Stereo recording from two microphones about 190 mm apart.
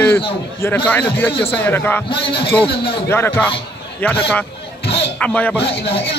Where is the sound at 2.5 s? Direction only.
25° left (ahead or behind).